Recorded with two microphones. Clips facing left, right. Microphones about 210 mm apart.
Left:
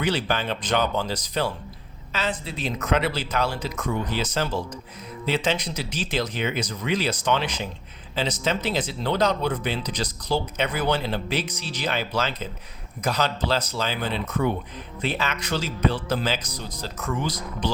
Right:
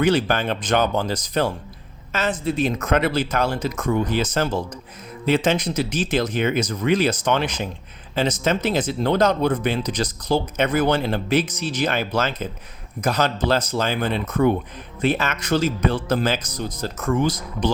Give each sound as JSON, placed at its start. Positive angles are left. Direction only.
{"t": 0.0, "sound": "speech", "side_deg": -50}